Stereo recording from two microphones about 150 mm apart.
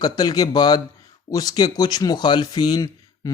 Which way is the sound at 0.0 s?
25° left (ahead or behind).